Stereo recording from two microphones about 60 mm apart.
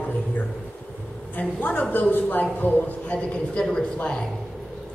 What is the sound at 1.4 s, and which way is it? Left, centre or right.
A woman's voice, left.